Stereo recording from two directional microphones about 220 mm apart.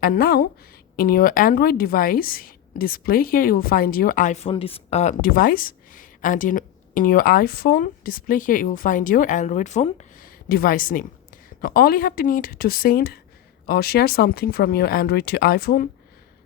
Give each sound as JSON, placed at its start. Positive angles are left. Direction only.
{"t": 0.0, "sound": "speech", "side_deg": 40}